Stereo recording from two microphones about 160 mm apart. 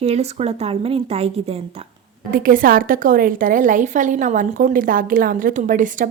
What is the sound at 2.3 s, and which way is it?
A woman's voice, 60° right (ahead or behind).